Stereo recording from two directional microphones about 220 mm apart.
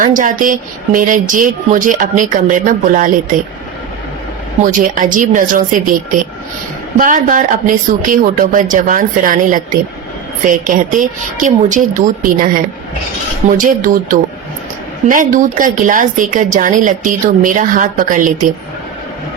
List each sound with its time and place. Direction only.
0.0 s a woman's voice: 35° right (ahead or behind)
4.6 s a woman's voice: 35° right (ahead or behind)
7.0 s a woman's voice: 35° right (ahead or behind)
13.6 s a woman's voice: 40° right (ahead or behind)